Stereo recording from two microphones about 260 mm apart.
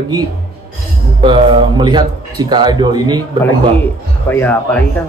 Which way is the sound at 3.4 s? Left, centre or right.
Centre.